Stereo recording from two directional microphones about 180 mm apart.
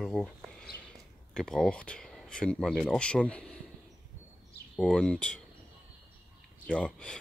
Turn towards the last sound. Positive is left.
turn(degrees=5)  # may be behind; listen again after turning